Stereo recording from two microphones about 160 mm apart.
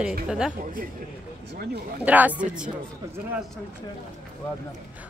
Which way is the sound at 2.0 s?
10° right (ahead or behind).